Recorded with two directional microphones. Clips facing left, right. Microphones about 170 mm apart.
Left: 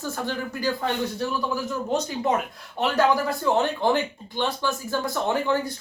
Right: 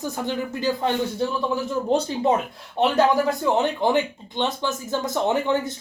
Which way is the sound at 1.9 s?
30° right (ahead or behind).